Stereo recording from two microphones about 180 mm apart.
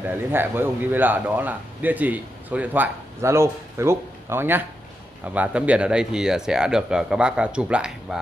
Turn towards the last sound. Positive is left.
turn(degrees=-5)  # may be behind; listen again after turning